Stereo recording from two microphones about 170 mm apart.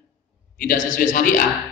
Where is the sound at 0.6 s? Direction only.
55° left (ahead or behind).